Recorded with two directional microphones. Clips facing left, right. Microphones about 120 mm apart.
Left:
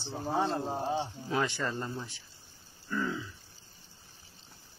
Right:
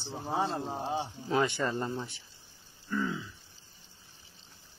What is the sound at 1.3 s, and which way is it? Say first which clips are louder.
Speech: right 3 dB; 20° right (ahead or behind).